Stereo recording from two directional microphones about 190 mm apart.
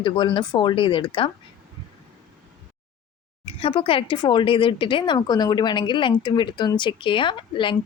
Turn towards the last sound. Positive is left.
turn(degrees=25)  # may be behind; listen again after turning